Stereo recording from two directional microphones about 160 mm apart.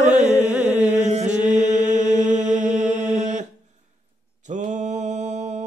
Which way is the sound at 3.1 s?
50° right (ahead or behind).